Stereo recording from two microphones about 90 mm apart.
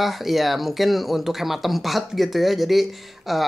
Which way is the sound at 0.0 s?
Centre (ahead or behind).